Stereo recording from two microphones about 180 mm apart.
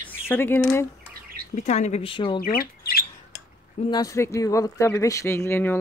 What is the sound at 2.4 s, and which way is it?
Squawk, 55° left (ahead or behind).